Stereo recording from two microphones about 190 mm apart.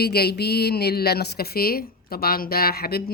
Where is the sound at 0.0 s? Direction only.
55° left (ahead or behind).